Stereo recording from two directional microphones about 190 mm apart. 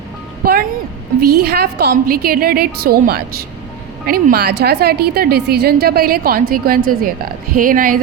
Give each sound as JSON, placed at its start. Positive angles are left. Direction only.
{"t": 0.4, "sound": "a woman's voice", "side_deg": -50}